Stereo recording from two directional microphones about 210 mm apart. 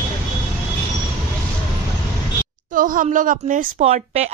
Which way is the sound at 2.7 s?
40° right (ahead or behind).